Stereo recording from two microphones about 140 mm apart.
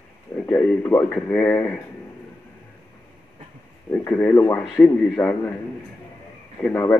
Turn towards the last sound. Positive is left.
turn(degrees=10)  # may be behind; listen again after turning